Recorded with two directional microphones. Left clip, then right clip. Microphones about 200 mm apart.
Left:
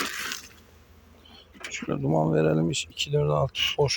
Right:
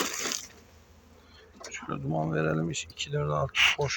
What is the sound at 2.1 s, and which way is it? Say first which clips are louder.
Speech: left 6 dB; 20° left (ahead or behind).